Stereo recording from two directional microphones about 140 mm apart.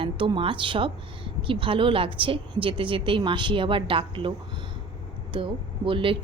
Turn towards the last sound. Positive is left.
turn(degrees=-40)  # may be behind; listen again after turning